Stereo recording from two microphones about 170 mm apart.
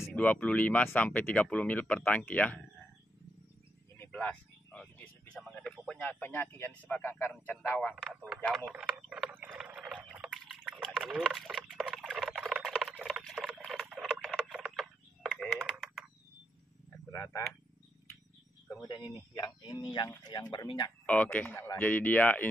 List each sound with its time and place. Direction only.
0.0 s speech: 10° left (ahead or behind)
4.0 s a sound: 10° left (ahead or behind)
5.4 s speech: centre (ahead or behind)
7.9 s a man's voice: 5° right (ahead or behind)
8.5 s a sound: 5° right (ahead or behind)
17.1 s speech: 15° left (ahead or behind)
18.7 s speech: 20° left (ahead or behind)
21.0 s speech: 10° left (ahead or behind)